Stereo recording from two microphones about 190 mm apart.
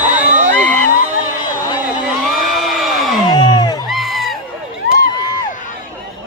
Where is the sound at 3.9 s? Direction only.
Centre (ahead or behind).